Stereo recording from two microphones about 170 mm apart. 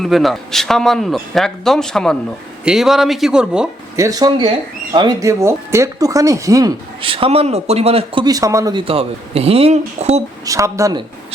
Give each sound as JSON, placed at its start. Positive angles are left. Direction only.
{"t": 0.0, "sound": "a man's voice", "side_deg": 0}
{"t": 3.9, "sound": "speech", "side_deg": -20}
{"t": 10.4, "sound": "speech", "side_deg": -20}